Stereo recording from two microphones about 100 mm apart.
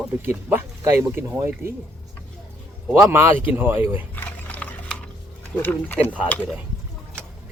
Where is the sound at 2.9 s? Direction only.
10° right (ahead or behind).